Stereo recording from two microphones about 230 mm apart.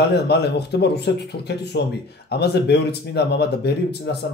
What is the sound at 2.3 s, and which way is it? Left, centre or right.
Speech, left.